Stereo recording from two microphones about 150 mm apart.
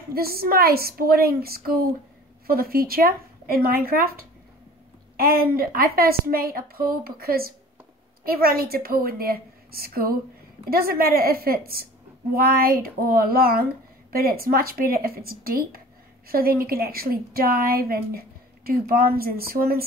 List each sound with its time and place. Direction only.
0.1 s a woman's voice: 90° right
5.1 s a woman's voice: 85° right